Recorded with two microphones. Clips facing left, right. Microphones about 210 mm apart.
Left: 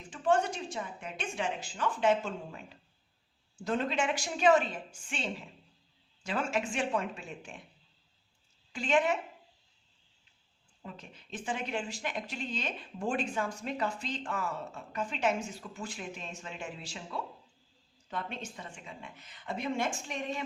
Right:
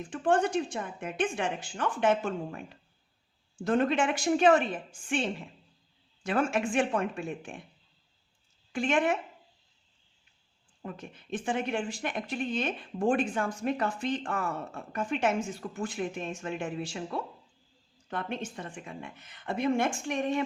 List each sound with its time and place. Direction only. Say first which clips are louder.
0.1 s a woman's voice: right 3 dB; 55° right (ahead or behind)
8.7 s a woman's voice: right 2 dB; 55° right (ahead or behind)
10.8 s speech: right 7 dB; 55° right (ahead or behind)